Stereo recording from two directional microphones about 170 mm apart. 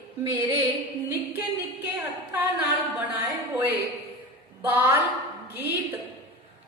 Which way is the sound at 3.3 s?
15° right (ahead or behind).